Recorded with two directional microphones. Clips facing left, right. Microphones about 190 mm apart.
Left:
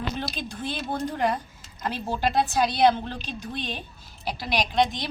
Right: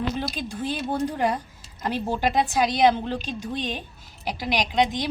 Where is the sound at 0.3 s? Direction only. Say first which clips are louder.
Right 3 dB; 10° right (ahead or behind).